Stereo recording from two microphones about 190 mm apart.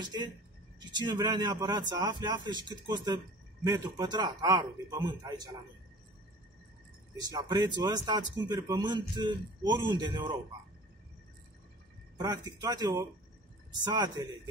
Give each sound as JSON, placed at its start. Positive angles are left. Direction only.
{"t": 0.0, "sound": "speech", "side_deg": -20}
{"t": 7.2, "sound": "speech", "side_deg": -20}
{"t": 12.2, "sound": "speech", "side_deg": -20}